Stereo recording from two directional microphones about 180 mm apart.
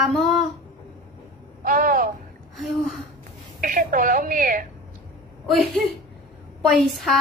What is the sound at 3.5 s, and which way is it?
A woman's voice, 50° right (ahead or behind).